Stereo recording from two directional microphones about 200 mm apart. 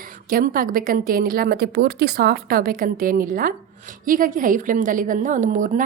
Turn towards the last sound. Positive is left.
turn(degrees=-40)  # may be behind; listen again after turning